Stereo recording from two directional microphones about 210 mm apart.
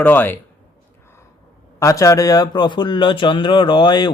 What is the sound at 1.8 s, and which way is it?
Speech, 15° left (ahead or behind).